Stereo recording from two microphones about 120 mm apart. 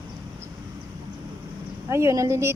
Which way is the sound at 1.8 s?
25° right (ahead or behind).